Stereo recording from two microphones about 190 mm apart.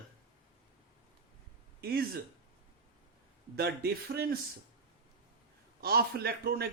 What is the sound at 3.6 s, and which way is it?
Speech, 55° right (ahead or behind).